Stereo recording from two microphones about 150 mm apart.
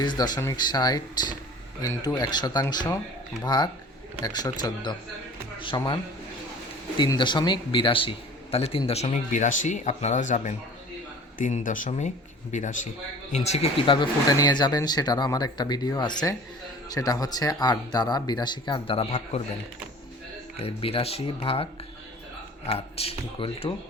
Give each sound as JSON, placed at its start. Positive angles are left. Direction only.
{"t": 0.0, "sound": "speech", "side_deg": 30}
{"t": 20.6, "sound": "speech", "side_deg": 40}